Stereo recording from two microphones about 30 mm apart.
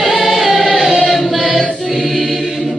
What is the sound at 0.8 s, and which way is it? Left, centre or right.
Choir, centre.